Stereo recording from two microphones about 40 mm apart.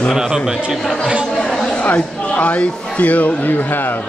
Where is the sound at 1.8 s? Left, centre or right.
Left.